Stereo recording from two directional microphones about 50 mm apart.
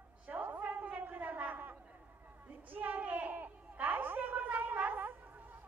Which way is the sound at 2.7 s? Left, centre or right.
Right.